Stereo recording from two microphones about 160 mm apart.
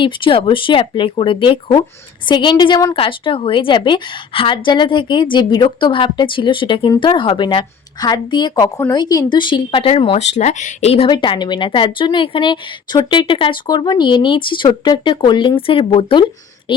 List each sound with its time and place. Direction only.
0.0 s a woman's voice: 30° left (ahead or behind)
11.1 s a woman's voice: 30° left (ahead or behind)